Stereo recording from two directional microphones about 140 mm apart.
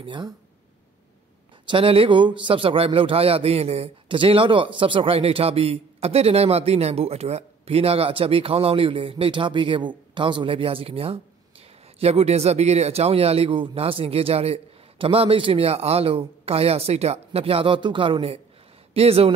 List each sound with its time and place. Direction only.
0.0 s a man's voice: 35° right (ahead or behind)
1.7 s a man's voice: 40° right (ahead or behind)